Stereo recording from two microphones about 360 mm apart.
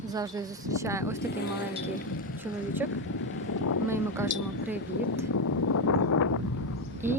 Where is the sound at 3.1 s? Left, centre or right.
Left.